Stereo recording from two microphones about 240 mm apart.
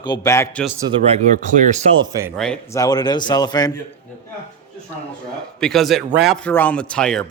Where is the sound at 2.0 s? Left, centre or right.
Centre.